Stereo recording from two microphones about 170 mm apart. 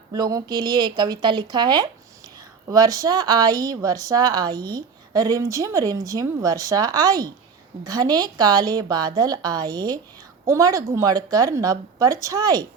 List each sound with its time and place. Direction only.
0.1 s speech: 20° right (ahead or behind)